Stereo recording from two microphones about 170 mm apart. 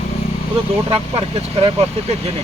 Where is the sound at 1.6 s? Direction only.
35° right (ahead or behind).